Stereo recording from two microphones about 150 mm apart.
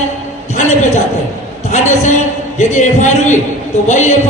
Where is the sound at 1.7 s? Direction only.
50° left (ahead or behind).